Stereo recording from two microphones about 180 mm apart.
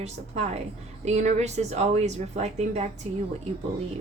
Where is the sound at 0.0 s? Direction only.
40° right (ahead or behind).